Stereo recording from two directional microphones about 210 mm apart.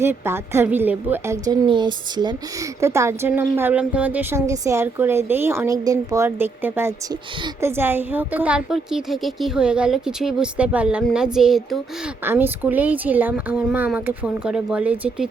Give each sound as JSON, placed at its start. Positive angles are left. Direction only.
{"t": 0.0, "sound": "a woman's voice", "side_deg": -10}
{"t": 1.6, "sound": "a woman's voice", "side_deg": -20}